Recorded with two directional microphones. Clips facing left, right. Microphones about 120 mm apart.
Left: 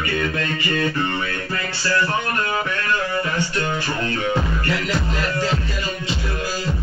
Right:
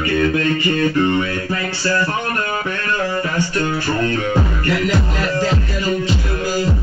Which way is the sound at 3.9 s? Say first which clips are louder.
Right 4 dB; 40° right (ahead or behind).